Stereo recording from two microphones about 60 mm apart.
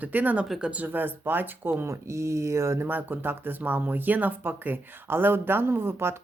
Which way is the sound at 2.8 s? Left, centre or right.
Right.